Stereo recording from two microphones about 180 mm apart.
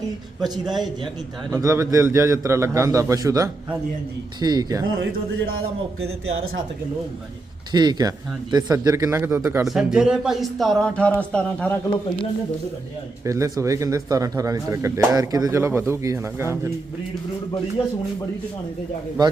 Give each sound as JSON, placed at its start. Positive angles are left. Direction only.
{"t": 1.5, "sound": "speech", "side_deg": -15}
{"t": 7.7, "sound": "speech", "side_deg": -20}
{"t": 9.6, "sound": "speech", "side_deg": -5}
{"t": 13.2, "sound": "speech", "side_deg": -15}
{"t": 17.8, "sound": "speech", "side_deg": 30}